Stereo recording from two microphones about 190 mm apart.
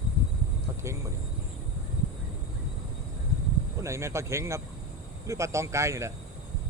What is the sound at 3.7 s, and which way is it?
Speech, 15° right (ahead or behind).